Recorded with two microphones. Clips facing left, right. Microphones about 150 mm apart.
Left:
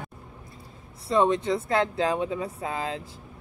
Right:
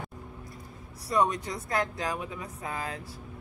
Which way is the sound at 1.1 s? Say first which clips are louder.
Left 5 dB; 25° left (ahead or behind).